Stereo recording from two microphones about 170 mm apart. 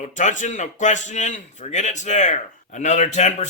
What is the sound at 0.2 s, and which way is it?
A man's voice, 45° left (ahead or behind).